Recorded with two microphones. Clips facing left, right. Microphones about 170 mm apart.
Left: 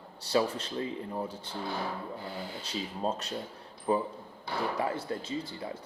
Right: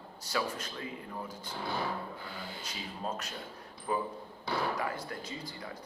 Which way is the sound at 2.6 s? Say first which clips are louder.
Left 7 dB; 30° left (ahead or behind).